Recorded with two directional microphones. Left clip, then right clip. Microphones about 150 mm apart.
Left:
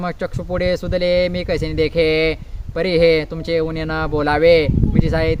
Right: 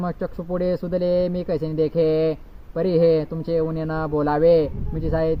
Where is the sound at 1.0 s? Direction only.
55° left (ahead or behind).